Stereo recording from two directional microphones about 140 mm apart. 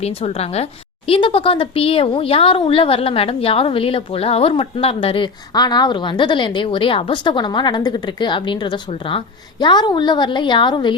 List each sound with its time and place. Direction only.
0.0 s a woman's voice: 45° left (ahead or behind)